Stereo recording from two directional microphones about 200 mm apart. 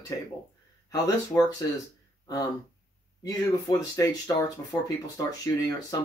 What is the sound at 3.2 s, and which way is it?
Speech, 20° left (ahead or behind).